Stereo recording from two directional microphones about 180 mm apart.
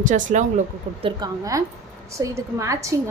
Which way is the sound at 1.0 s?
20° right (ahead or behind).